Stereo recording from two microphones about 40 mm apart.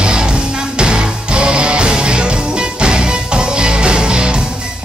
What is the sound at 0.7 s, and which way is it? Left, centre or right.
Music, right.